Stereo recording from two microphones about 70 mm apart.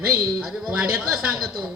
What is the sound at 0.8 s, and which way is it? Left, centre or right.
Speech, centre.